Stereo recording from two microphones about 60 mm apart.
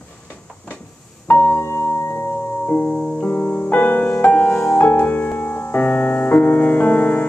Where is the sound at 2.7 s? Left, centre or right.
Left.